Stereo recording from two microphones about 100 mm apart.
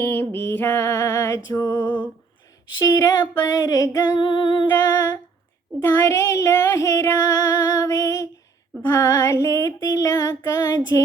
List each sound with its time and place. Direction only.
0.0 s female singing: 20° left (ahead or behind)
2.8 s female singing: 35° left (ahead or behind)
4.2 s female singing: 50° left (ahead or behind)
4.7 s female singing: 20° left (ahead or behind)